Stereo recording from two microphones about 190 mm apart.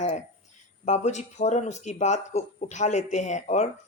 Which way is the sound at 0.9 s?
35° left (ahead or behind).